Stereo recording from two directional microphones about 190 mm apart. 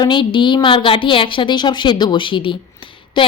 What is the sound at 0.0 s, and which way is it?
A woman's voice, 25° left (ahead or behind).